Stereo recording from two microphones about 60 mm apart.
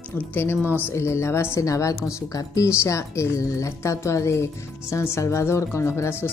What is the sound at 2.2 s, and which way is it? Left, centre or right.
Speech, left.